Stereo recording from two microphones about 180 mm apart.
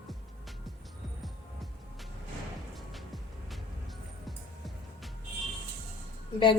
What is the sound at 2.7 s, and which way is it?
Music, centre (ahead or behind).